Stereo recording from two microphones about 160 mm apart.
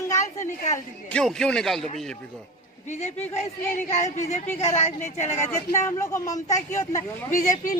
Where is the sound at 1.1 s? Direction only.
5° left (ahead or behind).